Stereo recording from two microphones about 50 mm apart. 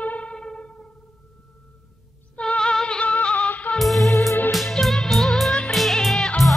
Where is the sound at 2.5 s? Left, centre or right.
Centre.